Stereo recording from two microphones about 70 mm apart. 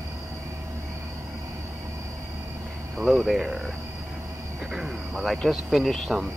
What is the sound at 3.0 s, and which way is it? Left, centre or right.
Speech, centre.